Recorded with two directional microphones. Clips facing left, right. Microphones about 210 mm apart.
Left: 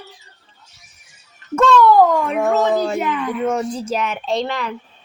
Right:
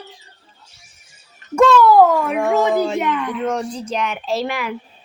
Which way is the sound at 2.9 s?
Centre (ahead or behind).